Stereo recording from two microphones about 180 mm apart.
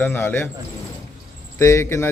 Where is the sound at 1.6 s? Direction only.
15° left (ahead or behind).